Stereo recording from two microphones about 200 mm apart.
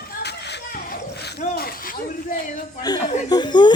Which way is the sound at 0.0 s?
55° left (ahead or behind).